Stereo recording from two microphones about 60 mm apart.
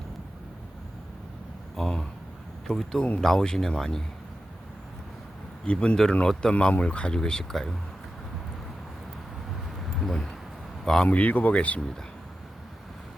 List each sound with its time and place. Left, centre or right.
1.7 s speech: centre
5.6 s speech: centre
9.8 s a sound: centre
10.8 s speech: centre
11.1 s speech: left